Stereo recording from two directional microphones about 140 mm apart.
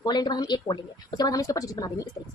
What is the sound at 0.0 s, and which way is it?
A woman's voice, 30° left (ahead or behind).